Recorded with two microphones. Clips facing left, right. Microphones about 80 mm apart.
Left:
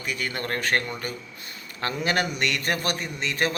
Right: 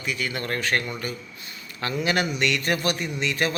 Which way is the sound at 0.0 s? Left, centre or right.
Left.